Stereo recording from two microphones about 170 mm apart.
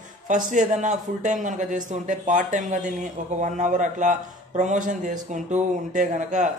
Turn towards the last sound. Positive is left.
turn(degrees=-45)  # may be behind; listen again after turning